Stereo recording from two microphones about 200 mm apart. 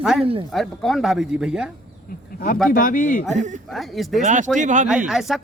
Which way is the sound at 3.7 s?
Centre (ahead or behind).